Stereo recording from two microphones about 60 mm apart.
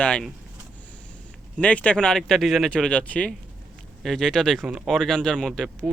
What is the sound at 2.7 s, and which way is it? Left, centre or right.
Speech, centre.